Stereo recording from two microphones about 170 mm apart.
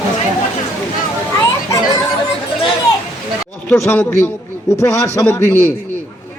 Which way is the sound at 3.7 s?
10° left (ahead or behind).